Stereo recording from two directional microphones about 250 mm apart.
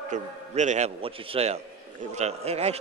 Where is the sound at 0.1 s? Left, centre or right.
Right.